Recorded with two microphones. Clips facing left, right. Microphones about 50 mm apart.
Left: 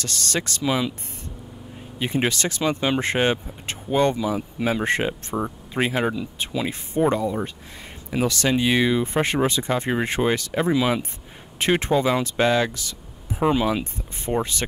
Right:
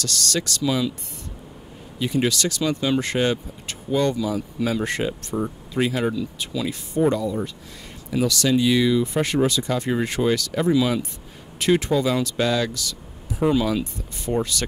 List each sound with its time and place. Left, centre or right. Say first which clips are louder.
0.0 s speech: right 1 dB; left
2.0 s speech: right 1 dB; left